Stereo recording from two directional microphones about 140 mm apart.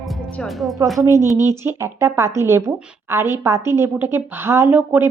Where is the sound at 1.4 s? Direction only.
20° right (ahead or behind).